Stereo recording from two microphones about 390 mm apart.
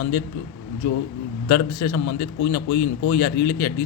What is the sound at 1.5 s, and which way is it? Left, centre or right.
A man's voice, left.